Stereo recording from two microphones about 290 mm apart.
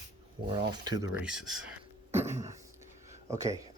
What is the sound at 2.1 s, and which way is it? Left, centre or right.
Throat clearing, centre.